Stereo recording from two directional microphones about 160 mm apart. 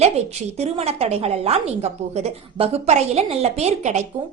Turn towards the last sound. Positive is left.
turn(degrees=-45)  # may be behind; listen again after turning